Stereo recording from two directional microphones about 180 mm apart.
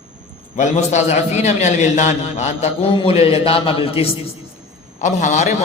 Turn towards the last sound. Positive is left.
turn(degrees=40)  # may be behind; listen again after turning